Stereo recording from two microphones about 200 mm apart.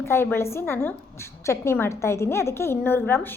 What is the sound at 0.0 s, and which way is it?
A woman's voice, 10° left (ahead or behind).